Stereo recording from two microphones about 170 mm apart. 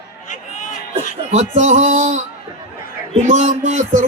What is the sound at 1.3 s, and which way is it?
Speech, 45° right (ahead or behind).